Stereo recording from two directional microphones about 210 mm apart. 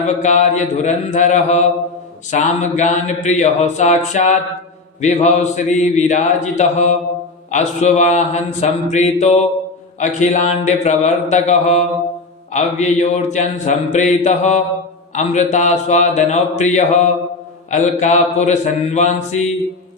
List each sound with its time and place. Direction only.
0.2 s mantra: 35° left (ahead or behind)